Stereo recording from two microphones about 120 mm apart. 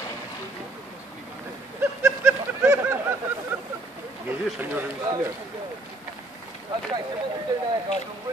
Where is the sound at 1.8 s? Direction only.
20° right (ahead or behind).